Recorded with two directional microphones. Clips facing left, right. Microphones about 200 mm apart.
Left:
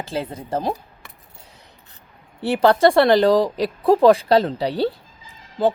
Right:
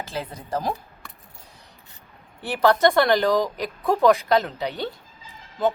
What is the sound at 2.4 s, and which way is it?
Speech, 30° left (ahead or behind).